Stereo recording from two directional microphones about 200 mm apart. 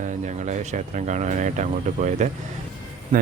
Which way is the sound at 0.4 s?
35° right (ahead or behind).